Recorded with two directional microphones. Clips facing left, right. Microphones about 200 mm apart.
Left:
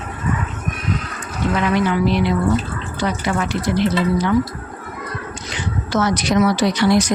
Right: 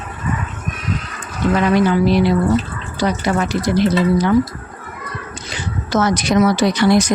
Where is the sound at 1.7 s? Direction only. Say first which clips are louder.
Right 3 dB; 35° right (ahead or behind).